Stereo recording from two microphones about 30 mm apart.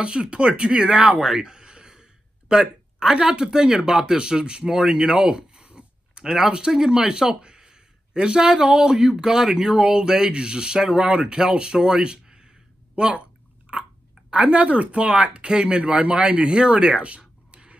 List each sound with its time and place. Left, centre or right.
0.0 s speech: right
1.2 s speech: right
5.1 s speech: right
5.8 s a sound: right
6.7 s speech: right
12.9 s speech: right
14.3 s speech: right
17.5 s a sound: right